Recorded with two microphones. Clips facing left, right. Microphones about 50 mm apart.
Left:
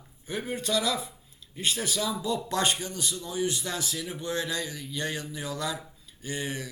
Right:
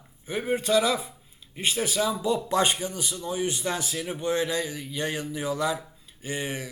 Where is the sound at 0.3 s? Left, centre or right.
Centre.